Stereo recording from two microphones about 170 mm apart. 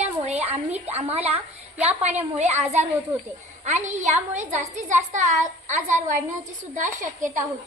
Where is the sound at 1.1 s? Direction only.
40° right (ahead or behind).